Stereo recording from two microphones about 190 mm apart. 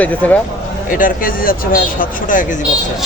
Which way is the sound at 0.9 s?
45° left (ahead or behind).